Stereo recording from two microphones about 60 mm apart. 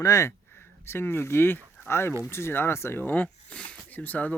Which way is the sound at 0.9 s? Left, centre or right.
Left.